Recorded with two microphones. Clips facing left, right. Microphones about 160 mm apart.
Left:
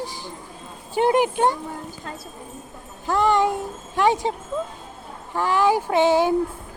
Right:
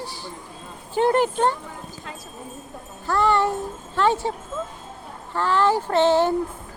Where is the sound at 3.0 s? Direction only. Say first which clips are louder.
Left 1 dB; 15° left (ahead or behind).